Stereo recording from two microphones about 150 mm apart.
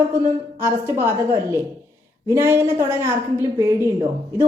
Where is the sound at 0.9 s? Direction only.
15° right (ahead or behind).